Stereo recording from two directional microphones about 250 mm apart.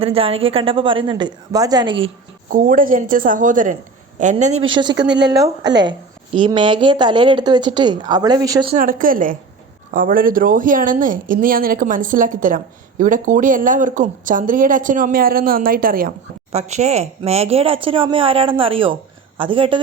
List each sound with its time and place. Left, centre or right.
0.0 s a woman's voice: right
2.5 s a woman's voice: right; by 8.7 s centre
8.7 s a woman's voice: right